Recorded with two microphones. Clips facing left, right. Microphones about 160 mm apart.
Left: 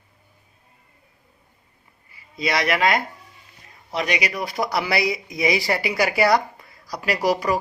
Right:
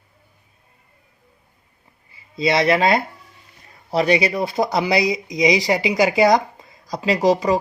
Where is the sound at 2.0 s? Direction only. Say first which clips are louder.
Right 5 dB; 25° right (ahead or behind).